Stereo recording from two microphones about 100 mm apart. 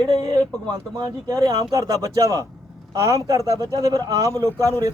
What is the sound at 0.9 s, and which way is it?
Speech, 40° right (ahead or behind).